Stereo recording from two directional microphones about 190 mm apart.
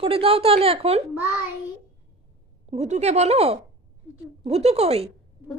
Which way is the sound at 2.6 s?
35° right (ahead or behind).